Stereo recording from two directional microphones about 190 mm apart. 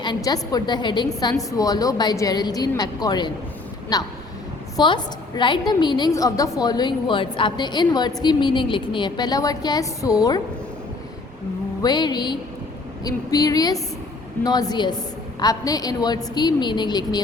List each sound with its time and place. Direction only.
0.0 s a woman's voice: 20° left (ahead or behind)
11.8 s a woman's voice: 20° left (ahead or behind)